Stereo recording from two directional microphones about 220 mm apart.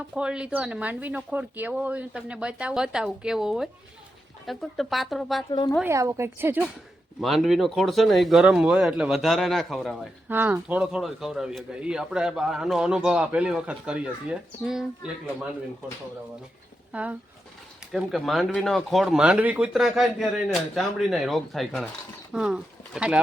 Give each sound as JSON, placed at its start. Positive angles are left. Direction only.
{"t": 0.1, "sound": "speech", "side_deg": -5}
{"t": 5.5, "sound": "a woman's voice", "side_deg": 20}
{"t": 5.8, "sound": "speech", "side_deg": -10}
{"t": 16.9, "sound": "speech", "side_deg": -5}